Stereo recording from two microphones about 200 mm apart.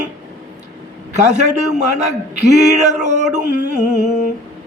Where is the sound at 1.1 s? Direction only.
35° right (ahead or behind).